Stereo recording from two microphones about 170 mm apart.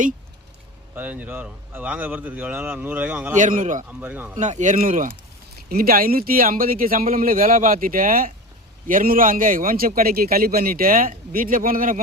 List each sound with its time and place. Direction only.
0.9 s speech: 10° right (ahead or behind)
3.3 s speech: 50° right (ahead or behind)
3.8 s speech: 10° right (ahead or behind)
4.4 s speech: 45° right (ahead or behind)
5.6 s a man's voice: 60° right (ahead or behind)